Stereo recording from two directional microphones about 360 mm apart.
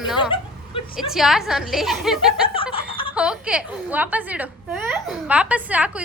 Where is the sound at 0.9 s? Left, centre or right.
Centre.